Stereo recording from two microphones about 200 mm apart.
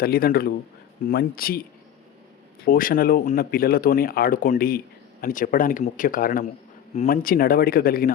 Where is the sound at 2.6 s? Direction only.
45° left (ahead or behind).